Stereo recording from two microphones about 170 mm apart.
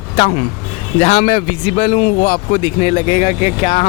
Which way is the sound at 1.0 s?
40° left (ahead or behind).